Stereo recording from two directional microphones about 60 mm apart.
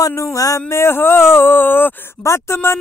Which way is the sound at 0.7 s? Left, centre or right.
Left.